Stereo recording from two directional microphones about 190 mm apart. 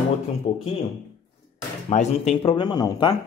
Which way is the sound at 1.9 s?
35° left (ahead or behind).